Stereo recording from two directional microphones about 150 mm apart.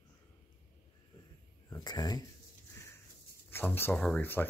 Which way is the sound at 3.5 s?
15° left (ahead or behind).